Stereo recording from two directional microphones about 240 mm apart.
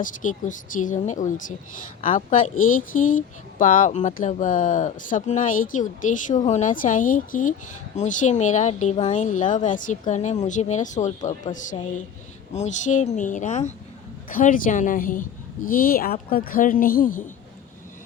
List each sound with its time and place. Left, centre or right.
0.0 s speech: left